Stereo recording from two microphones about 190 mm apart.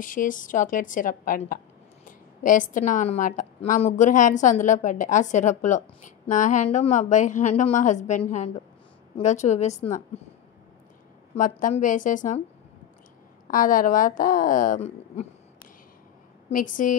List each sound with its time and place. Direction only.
0.0 s a woman's voice: 45° left (ahead or behind)
11.3 s a woman's voice: 45° left (ahead or behind)
13.5 s a woman's voice: 45° left (ahead or behind)